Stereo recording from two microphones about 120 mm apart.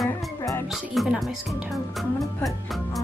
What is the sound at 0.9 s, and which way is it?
Speech, centre (ahead or behind).